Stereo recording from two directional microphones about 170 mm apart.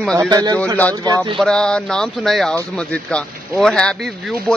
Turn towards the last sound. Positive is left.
turn(degrees=0)  # may be behind; listen again after turning